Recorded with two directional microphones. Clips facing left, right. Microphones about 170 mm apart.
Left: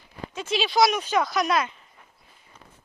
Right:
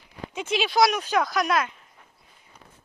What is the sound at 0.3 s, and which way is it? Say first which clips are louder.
Speech: even; 10° right (ahead or behind).